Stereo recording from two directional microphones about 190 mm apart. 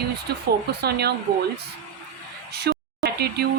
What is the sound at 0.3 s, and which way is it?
Speech, 55° right (ahead or behind).